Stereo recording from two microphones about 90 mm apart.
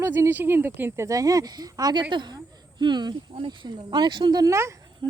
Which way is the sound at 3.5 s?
55° right (ahead or behind).